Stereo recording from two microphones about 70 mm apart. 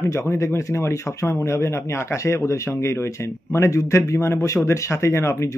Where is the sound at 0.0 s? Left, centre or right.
Left.